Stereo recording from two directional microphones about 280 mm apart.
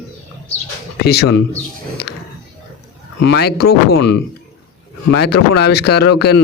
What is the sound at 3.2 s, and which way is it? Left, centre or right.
Speech, left.